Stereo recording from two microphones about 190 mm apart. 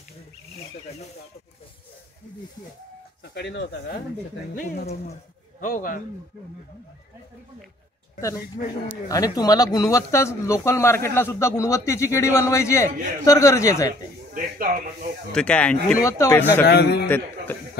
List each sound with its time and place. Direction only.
3.3 s speech: 65° left (ahead or behind)
4.6 s speech: 45° left (ahead or behind)
8.6 s speech: 45° left (ahead or behind)
9.1 s speech: 20° left (ahead or behind)
14.3 s speech: 45° right (ahead or behind)
15.3 s speech: 5° left (ahead or behind)
16.0 s speech: 15° left (ahead or behind)
16.6 s speech: 60° left (ahead or behind)